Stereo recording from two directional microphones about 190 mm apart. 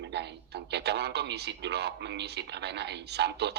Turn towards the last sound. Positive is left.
turn(degrees=-60)  # may be behind; listen again after turning